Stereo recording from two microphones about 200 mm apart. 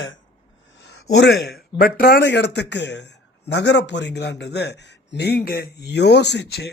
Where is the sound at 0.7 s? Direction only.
60° left (ahead or behind).